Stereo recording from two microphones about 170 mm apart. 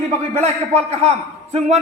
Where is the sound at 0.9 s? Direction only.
40° right (ahead or behind).